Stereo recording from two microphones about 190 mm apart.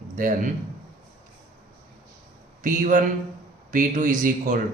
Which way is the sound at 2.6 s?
45° right (ahead or behind).